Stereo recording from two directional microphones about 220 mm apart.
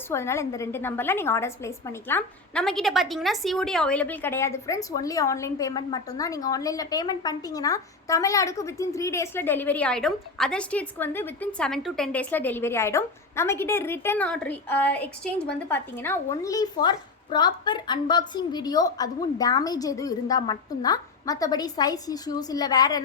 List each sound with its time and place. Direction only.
0.1 s a woman's voice: 10° left (ahead or behind)